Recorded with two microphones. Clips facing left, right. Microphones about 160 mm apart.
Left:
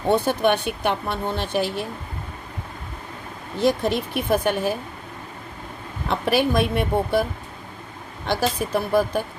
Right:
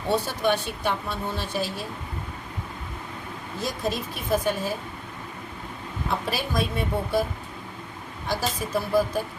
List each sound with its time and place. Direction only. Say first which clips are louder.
0.1 s speech: left 5 dB; 60° left (ahead or behind)
3.6 s speech: left 8 dB; 65° left (ahead or behind)
6.1 s speech: left 8 dB; 65° left (ahead or behind)
8.3 s speech: left 5 dB; 60° left (ahead or behind)